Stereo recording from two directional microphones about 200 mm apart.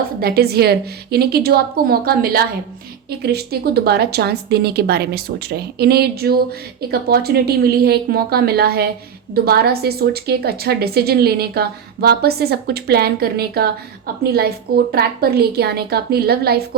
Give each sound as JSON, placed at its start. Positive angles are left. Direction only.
{"t": 0.2, "sound": "a woman's voice", "side_deg": -50}
{"t": 14.9, "sound": "a woman's voice", "side_deg": -50}